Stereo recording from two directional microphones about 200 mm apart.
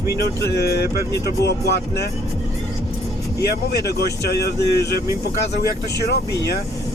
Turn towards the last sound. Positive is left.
turn(degrees=55)  # may be behind; listen again after turning